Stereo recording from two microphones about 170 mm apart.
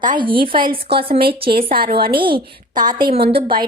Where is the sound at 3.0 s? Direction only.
30° right (ahead or behind).